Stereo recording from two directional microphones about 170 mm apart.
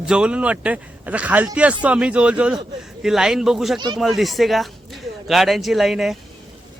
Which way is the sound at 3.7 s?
25° right (ahead or behind).